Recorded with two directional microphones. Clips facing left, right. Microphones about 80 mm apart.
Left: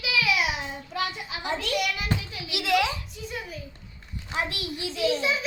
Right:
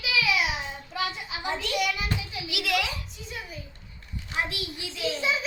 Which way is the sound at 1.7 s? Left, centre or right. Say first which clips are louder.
Even; centre.